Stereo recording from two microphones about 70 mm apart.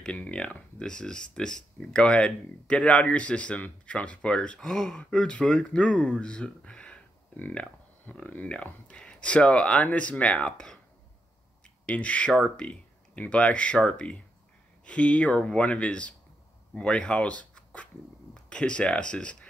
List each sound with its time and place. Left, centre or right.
0.0 s speech: centre
11.8 s speech: centre